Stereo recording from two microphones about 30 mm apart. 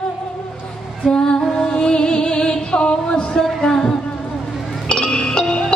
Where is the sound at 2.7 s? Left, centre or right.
Left.